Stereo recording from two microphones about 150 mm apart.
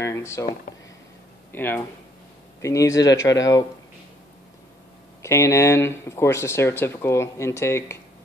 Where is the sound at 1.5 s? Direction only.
15° left (ahead or behind).